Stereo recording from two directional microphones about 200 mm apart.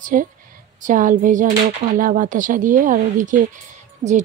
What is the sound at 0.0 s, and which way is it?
Speech, 40° right (ahead or behind).